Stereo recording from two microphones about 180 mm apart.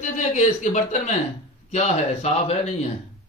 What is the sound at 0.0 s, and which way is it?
Speech, 45° left (ahead or behind).